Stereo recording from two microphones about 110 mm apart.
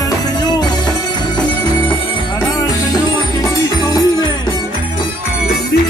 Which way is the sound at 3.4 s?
30° left (ahead or behind).